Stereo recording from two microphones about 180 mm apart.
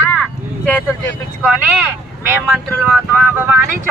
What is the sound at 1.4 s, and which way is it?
Speech, 5° right (ahead or behind).